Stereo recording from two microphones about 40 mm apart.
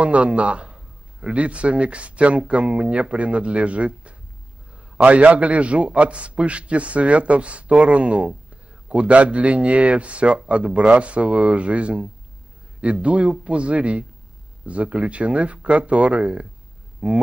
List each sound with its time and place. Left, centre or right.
0.0 s a man's voice: right